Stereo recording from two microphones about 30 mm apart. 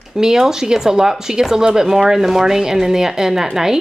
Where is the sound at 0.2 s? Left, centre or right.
Centre.